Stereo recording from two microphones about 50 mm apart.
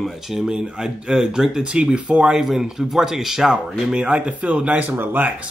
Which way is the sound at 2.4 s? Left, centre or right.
Centre.